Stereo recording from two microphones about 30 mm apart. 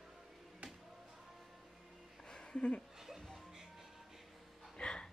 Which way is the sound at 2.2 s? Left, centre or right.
Left.